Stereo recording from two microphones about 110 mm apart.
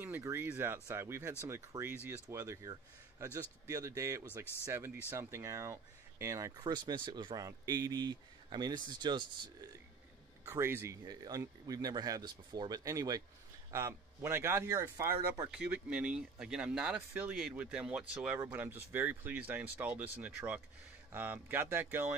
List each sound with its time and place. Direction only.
0.0 s speech: 20° right (ahead or behind)
6.5 s speech: 40° right (ahead or behind)
10.4 s speech: 20° right (ahead or behind)
11.1 s speech: 35° right (ahead or behind)
15.5 s speech: 5° right (ahead or behind)